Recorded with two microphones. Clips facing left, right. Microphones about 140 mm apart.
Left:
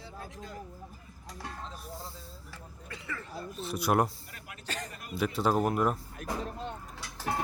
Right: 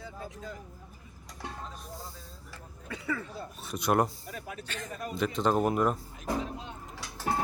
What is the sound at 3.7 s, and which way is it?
Speech, 5° left (ahead or behind).